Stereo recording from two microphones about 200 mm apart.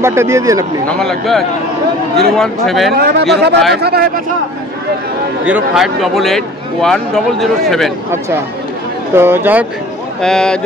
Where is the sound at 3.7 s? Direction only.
50° right (ahead or behind).